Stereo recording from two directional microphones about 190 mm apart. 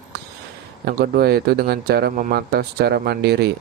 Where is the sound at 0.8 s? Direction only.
55° right (ahead or behind).